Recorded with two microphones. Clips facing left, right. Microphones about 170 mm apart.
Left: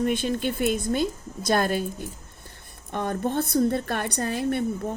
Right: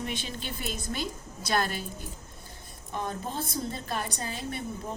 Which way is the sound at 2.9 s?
65° left (ahead or behind).